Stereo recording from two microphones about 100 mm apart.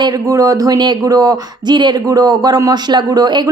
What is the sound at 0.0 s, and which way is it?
Speech, 40° right (ahead or behind).